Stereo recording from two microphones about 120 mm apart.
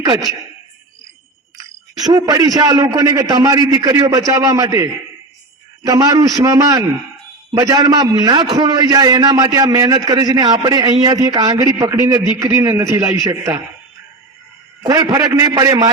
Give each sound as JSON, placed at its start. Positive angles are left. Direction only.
{"t": 2.0, "sound": "a man's voice", "side_deg": -35}
{"t": 14.8, "sound": "a man's voice", "side_deg": -30}